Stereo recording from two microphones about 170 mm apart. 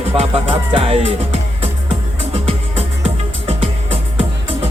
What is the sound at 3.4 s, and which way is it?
Music, 30° right (ahead or behind).